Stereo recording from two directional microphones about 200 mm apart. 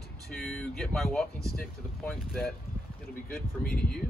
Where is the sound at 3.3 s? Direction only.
45° left (ahead or behind).